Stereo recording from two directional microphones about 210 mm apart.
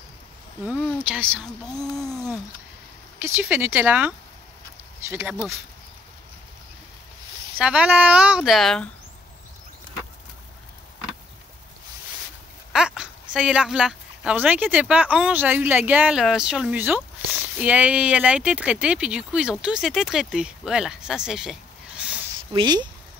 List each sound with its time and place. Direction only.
0.7 s speech: 10° left (ahead or behind)
1.0 s speech: 10° right (ahead or behind)
1.4 s speech: 20° left (ahead or behind)
3.2 s speech: 10° right (ahead or behind)
7.5 s speech: 5° right (ahead or behind)
12.7 s speech: 5° right (ahead or behind)
22.5 s speech: 20° right (ahead or behind)